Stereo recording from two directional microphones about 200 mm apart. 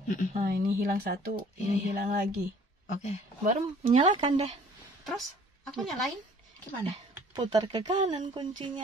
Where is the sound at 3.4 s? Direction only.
35° right (ahead or behind).